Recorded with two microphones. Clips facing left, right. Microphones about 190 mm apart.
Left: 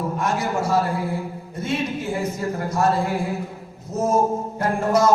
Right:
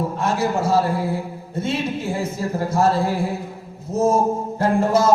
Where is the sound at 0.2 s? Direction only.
25° right (ahead or behind).